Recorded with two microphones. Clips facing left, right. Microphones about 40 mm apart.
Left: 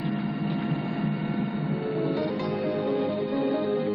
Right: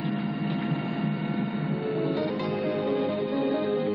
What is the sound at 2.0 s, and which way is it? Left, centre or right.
Music, centre.